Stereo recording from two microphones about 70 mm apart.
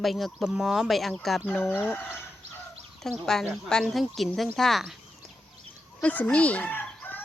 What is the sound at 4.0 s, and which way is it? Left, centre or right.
Speech, centre.